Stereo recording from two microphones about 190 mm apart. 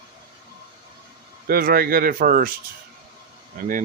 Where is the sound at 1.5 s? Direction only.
50° right (ahead or behind).